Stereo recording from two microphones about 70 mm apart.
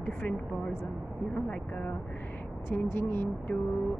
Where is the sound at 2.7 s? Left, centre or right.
Left.